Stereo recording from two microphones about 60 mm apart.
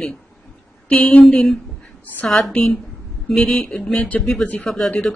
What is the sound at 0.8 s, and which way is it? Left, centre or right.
Speech, left.